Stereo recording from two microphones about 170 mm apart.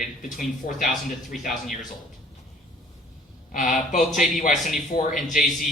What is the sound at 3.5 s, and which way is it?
Speech, 45° left (ahead or behind).